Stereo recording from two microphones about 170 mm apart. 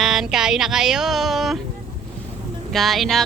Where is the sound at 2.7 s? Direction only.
Centre (ahead or behind).